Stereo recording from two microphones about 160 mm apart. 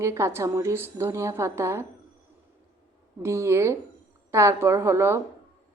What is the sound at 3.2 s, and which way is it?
A woman's voice, 15° right (ahead or behind).